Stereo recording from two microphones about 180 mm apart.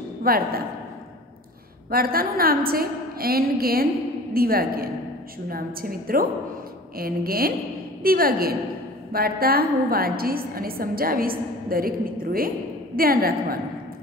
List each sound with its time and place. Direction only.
0.3 s a woman's voice: 55° right (ahead or behind)
1.9 s a woman's voice: 55° right (ahead or behind)